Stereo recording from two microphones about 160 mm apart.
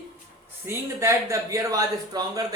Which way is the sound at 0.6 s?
15° right (ahead or behind).